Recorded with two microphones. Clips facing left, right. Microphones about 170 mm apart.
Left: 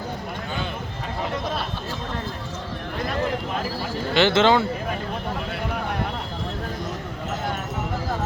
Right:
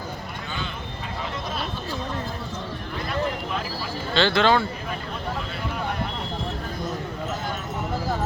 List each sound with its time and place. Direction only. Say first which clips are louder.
4.1 s speech: left 2 dB; 20° left (ahead or behind)